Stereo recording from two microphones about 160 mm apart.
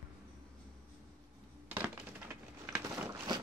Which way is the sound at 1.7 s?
10° right (ahead or behind).